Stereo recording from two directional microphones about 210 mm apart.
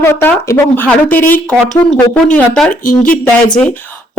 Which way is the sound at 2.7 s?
40° left (ahead or behind).